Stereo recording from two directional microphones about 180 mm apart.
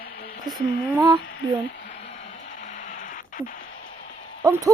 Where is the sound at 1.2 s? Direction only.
70° left (ahead or behind).